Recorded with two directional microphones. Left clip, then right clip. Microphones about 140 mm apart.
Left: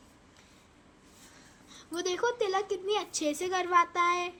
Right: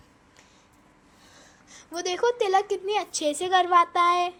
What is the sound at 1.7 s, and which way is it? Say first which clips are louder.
A child's voice: right 3 dB; 35° right (ahead or behind).